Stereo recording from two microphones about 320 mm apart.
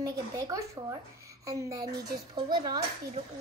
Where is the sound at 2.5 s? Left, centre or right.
Centre.